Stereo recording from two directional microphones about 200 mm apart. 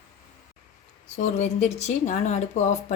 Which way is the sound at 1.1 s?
35° left (ahead or behind).